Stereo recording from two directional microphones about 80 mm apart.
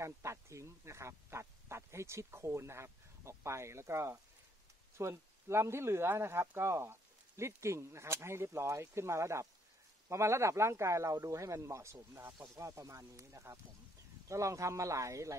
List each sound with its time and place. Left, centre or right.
0.0 s speech: right